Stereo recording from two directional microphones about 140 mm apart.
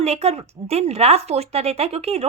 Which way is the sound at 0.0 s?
50° right (ahead or behind).